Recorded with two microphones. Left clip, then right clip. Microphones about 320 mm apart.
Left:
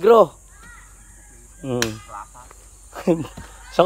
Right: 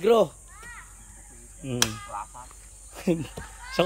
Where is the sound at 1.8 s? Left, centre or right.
Right.